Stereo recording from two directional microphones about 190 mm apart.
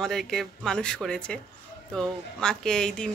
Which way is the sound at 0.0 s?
Centre (ahead or behind).